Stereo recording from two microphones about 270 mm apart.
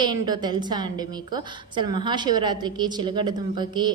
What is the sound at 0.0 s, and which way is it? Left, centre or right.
A woman's voice, centre.